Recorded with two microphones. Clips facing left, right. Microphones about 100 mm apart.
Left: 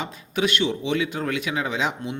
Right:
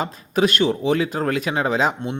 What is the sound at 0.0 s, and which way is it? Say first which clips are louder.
Speech: right 5 dB; 40° right (ahead or behind).